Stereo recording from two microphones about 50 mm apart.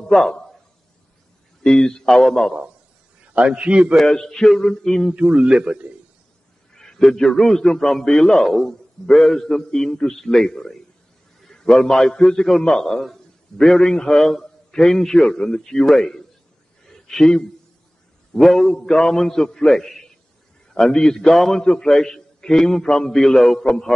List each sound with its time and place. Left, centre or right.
0.1 s a man's voice: centre
1.6 s a man's voice: centre
3.3 s a man's voice: right
4.0 s a man's voice: centre
5.1 s a man's voice: right
6.7 s a man's voice: centre
16.8 s a sound: centre
18.3 s a man's voice: centre